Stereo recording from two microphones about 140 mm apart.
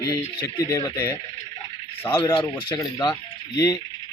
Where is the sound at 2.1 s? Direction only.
35° left (ahead or behind).